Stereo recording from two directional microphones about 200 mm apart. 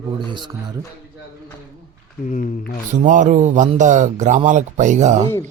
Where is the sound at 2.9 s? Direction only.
40° right (ahead or behind).